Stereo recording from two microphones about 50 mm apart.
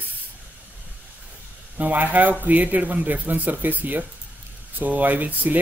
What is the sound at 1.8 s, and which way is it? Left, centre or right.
Speech, right.